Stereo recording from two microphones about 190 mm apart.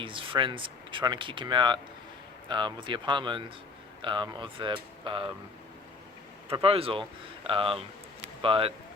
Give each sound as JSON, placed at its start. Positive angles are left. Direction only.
{"t": 0.0, "sound": "speech", "side_deg": -25}
{"t": 6.5, "sound": "speech", "side_deg": -30}